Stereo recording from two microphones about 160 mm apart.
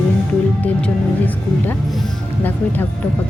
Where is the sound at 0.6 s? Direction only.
10° left (ahead or behind).